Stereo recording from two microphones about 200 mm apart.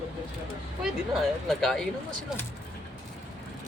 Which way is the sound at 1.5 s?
Centre (ahead or behind).